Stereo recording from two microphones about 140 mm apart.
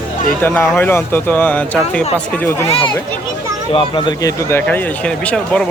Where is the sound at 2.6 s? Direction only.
40° left (ahead or behind).